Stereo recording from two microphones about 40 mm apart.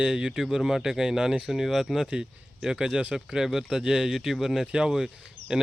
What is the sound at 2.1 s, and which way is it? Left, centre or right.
Speech, centre.